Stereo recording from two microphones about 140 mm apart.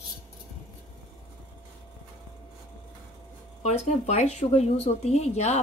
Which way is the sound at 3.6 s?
50° left (ahead or behind).